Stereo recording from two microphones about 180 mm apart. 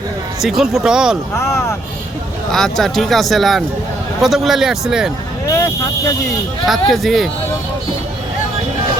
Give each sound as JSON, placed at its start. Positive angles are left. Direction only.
{"t": 0.4, "sound": "speech", "side_deg": 0}
{"t": 1.4, "sound": "speech", "side_deg": 15}
{"t": 2.5, "sound": "speech", "side_deg": 0}
{"t": 5.5, "sound": "speech", "side_deg": 15}
{"t": 6.7, "sound": "speech", "side_deg": 0}